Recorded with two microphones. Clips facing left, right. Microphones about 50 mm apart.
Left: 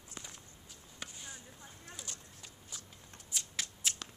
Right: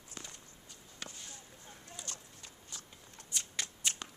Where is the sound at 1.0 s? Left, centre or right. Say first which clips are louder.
Left 1 dB; centre.